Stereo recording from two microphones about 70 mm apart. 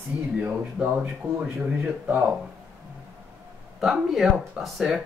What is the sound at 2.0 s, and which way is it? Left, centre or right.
Speech, right.